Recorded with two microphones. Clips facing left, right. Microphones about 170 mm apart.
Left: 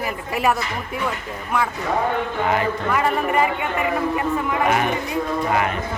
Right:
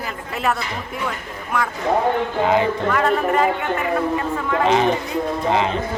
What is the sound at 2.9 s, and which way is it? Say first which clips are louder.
Speech: right 1 dB; 5° left (ahead or behind).